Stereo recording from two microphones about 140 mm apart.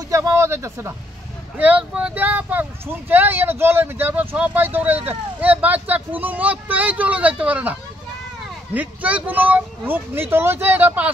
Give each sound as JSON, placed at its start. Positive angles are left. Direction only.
{"t": 0.1, "sound": "speech", "side_deg": -20}